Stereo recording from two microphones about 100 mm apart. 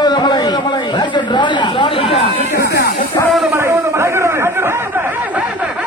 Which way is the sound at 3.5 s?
25° right (ahead or behind).